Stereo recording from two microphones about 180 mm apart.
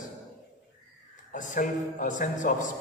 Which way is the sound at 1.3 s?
45° left (ahead or behind).